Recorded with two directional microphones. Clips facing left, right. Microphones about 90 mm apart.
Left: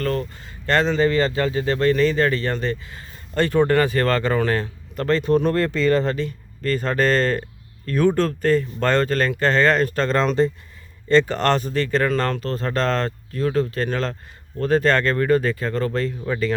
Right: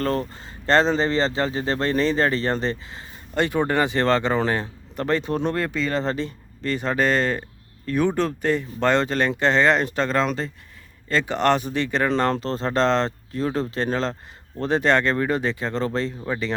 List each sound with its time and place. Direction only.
0.0 s speech: 30° right (ahead or behind)
3.3 s speech: 15° right (ahead or behind)
10.1 s speech: 5° right (ahead or behind)
11.1 s speech: 10° right (ahead or behind)